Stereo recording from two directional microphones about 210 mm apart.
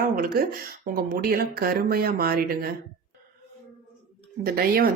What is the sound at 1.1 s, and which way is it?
Speech, 45° right (ahead or behind).